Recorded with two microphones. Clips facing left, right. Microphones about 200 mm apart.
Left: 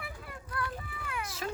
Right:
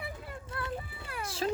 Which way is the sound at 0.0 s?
25° right (ahead or behind).